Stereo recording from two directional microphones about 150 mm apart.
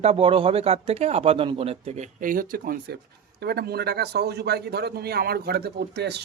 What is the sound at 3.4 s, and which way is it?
A man's voice, 90° right.